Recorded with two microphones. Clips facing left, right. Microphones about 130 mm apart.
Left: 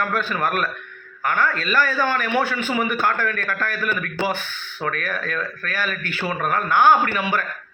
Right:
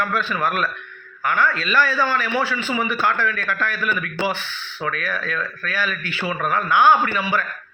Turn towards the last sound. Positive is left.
turn(degrees=45)  # may be behind; listen again after turning